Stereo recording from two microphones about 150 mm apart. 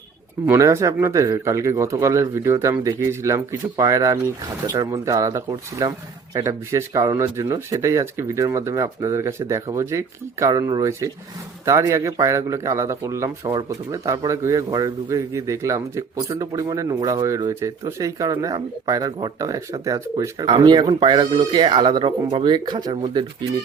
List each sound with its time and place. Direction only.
0.4 s a man's voice: 20° right (ahead or behind)